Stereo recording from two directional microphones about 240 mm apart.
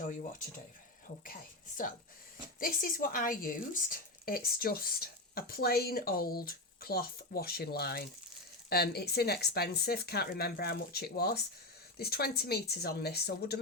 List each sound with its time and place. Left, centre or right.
1.2 s speech: left